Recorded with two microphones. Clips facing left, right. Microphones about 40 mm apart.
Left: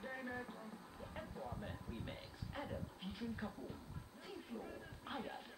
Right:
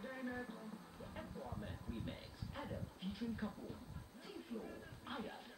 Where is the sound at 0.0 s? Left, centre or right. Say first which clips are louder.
Even; centre.